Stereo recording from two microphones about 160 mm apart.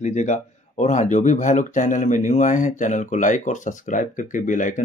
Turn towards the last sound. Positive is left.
turn(degrees=50)  # may be behind; listen again after turning